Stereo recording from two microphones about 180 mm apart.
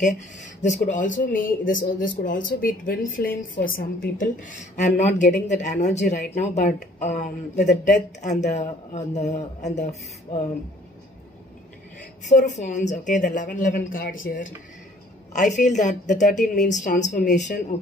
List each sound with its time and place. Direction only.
0.0 s a man's voice: 40° left (ahead or behind)
12.0 s speech: 45° left (ahead or behind)
15.5 s speech: 40° left (ahead or behind)